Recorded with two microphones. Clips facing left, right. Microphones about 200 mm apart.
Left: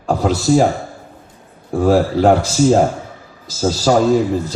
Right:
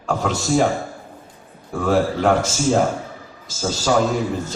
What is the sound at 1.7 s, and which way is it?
Speech, 35° left (ahead or behind).